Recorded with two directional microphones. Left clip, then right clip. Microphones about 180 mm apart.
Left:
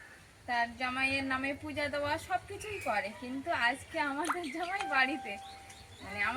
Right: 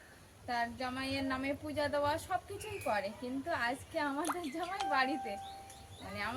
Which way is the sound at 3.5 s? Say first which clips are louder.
Left 5 dB; 15° right (ahead or behind).